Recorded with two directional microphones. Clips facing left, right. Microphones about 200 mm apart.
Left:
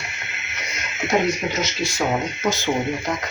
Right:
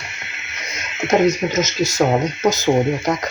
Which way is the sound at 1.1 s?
50° right (ahead or behind).